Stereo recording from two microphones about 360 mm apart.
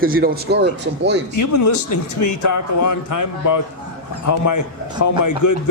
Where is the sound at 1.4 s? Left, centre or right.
Left.